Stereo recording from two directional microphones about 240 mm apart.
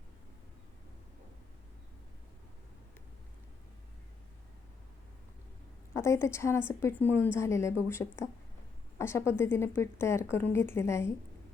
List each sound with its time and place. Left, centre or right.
5.9 s a woman's voice: centre